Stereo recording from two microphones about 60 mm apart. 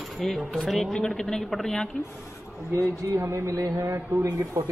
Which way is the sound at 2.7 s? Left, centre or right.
Right.